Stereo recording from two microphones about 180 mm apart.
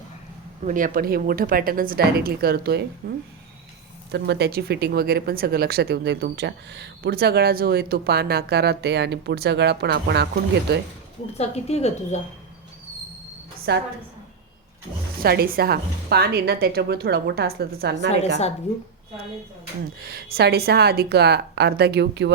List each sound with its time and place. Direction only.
0.6 s speech: 45° right (ahead or behind)
4.1 s speech: 70° right (ahead or behind)
11.3 s a woman's voice: 35° left (ahead or behind)
13.7 s a woman's voice: 65° right (ahead or behind)
15.2 s speech: 60° right (ahead or behind)
20.0 s speech: 60° right (ahead or behind)